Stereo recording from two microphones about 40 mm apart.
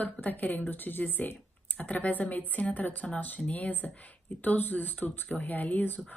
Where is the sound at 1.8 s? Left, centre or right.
Left.